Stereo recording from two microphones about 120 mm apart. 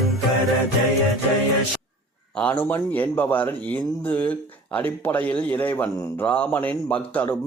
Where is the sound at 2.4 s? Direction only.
15° left (ahead or behind).